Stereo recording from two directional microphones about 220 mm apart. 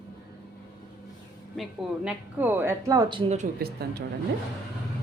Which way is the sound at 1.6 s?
5° right (ahead or behind).